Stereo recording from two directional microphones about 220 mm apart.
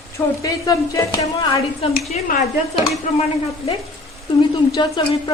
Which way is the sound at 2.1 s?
40° left (ahead or behind).